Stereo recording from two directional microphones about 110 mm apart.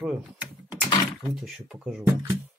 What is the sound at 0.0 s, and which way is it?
Speech, 5° right (ahead or behind).